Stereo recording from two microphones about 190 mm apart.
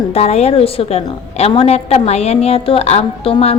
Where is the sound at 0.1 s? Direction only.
35° left (ahead or behind).